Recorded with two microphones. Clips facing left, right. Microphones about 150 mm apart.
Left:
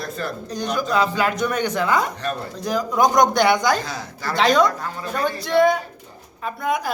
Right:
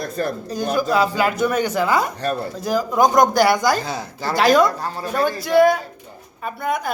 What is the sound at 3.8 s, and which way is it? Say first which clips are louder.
Speech: right 3 dB; 25° right (ahead or behind).